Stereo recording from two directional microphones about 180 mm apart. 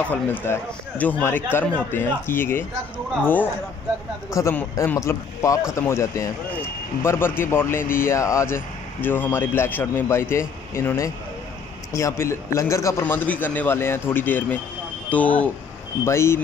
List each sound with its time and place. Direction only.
0.1 s a man's voice: 10° left (ahead or behind)
4.3 s a man's voice: 15° left (ahead or behind)